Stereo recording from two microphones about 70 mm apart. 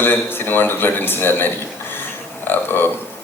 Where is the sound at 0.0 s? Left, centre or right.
Left.